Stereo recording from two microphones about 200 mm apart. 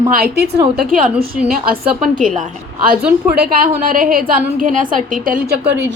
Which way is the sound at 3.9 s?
45° right (ahead or behind).